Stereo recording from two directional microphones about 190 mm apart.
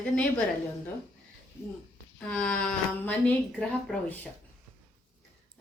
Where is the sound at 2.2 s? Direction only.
5° left (ahead or behind).